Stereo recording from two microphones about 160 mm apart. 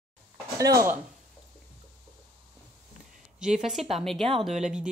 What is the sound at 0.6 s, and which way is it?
Speech, 20° right (ahead or behind).